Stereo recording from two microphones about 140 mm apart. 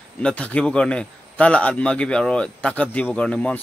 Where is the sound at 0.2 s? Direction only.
10° left (ahead or behind).